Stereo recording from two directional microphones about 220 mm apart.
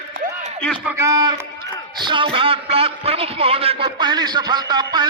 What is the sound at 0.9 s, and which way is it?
A man's voice, 10° right (ahead or behind).